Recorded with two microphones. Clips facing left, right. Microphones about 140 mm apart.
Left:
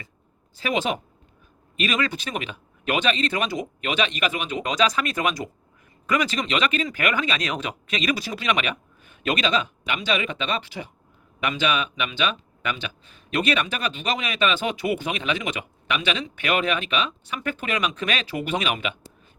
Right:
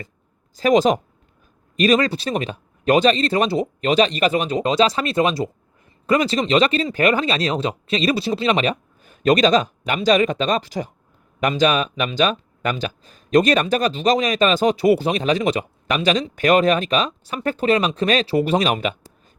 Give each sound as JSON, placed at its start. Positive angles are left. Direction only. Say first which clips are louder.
{"t": 0.5, "sound": "speech", "louder": "right 10 dB", "side_deg": -40}